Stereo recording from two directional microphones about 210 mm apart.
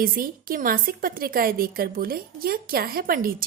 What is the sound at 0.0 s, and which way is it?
A woman's voice, 40° right (ahead or behind).